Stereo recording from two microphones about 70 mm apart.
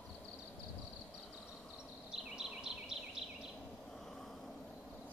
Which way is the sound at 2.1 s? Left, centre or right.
Centre.